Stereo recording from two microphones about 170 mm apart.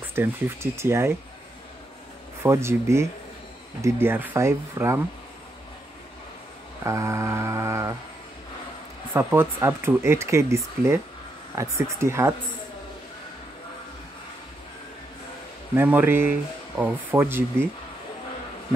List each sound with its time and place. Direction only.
0.1 s speech: 15° right (ahead or behind)
2.4 s speech: 15° right (ahead or behind)
6.8 s mantra: 15° right (ahead or behind)
9.1 s speech: 15° right (ahead or behind)
15.7 s speech: 10° right (ahead or behind)